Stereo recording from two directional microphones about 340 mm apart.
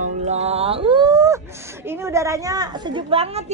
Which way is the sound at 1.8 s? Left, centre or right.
Centre.